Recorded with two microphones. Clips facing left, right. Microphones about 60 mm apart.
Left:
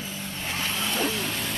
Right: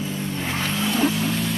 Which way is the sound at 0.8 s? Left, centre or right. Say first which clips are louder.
Right 7 dB; centre.